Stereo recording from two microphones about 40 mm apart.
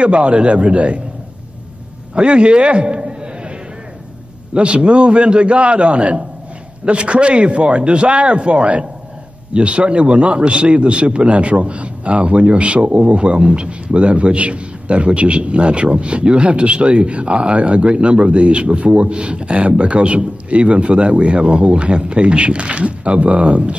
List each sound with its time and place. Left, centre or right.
0.0 s a man's voice: right
2.1 s a man's voice: right
4.6 s a man's voice: right